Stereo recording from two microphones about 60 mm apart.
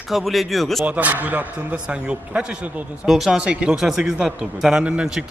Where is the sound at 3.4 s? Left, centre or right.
Centre.